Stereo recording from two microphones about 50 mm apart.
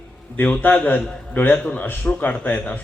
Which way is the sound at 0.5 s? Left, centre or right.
Left.